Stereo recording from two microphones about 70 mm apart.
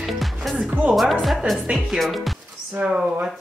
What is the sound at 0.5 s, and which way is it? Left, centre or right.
Speech, centre.